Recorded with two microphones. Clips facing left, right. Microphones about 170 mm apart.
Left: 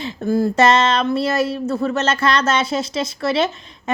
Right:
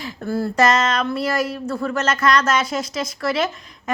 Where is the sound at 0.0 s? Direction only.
20° left (ahead or behind).